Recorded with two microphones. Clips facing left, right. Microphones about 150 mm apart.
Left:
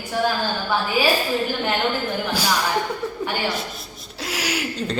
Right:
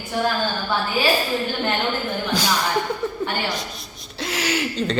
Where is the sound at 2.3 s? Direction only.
10° left (ahead or behind).